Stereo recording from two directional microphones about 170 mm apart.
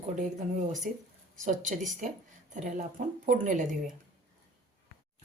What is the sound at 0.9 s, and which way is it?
Speech, 55° right (ahead or behind).